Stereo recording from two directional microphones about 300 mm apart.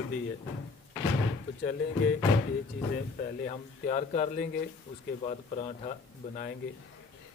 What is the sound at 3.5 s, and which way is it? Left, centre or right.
Speech, left.